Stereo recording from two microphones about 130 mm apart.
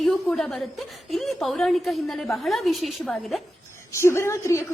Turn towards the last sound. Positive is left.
turn(degrees=20)  # may be behind; listen again after turning